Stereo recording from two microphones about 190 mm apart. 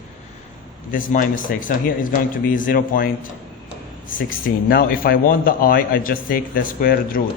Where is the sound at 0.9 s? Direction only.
45° left (ahead or behind).